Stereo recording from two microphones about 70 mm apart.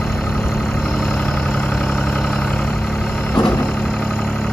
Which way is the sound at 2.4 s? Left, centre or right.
Centre.